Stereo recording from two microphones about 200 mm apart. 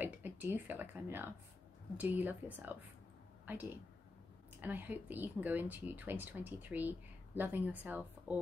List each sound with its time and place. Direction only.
0.0 s speech: 10° right (ahead or behind)